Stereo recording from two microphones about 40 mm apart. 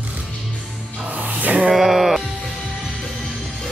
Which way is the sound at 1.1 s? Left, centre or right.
Right.